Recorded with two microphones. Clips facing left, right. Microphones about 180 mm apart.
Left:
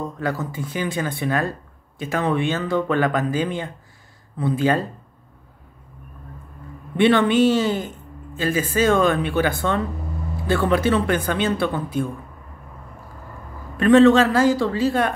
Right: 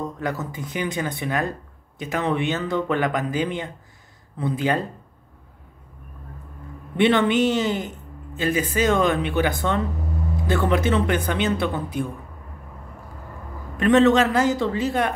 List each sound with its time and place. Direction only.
0.2 s speech: 20° right (ahead or behind)
7.0 s speech: 20° right (ahead or behind)
13.7 s speech: 20° right (ahead or behind)